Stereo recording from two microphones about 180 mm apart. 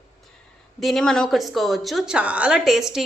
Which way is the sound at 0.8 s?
Centre (ahead or behind).